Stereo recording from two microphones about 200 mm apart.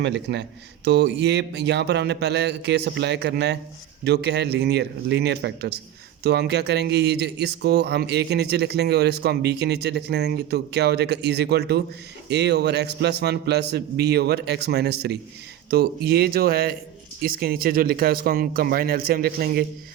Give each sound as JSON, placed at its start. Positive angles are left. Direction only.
{"t": 0.0, "sound": "speech", "side_deg": -60}